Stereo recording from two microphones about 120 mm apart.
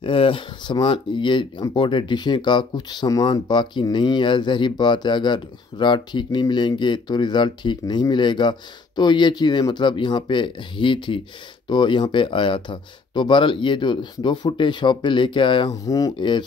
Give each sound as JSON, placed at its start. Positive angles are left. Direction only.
{"t": 0.0, "sound": "speech", "side_deg": 45}
{"t": 15.7, "sound": "speech", "side_deg": 30}